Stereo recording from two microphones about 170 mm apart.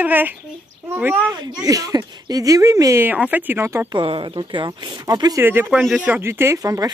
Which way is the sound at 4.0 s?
30° right (ahead or behind).